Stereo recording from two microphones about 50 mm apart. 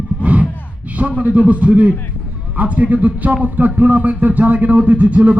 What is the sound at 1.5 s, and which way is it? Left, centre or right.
A man's voice, right.